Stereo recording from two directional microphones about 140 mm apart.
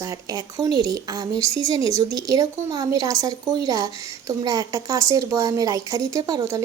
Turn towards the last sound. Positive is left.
turn(degrees=-25)  # may be behind; listen again after turning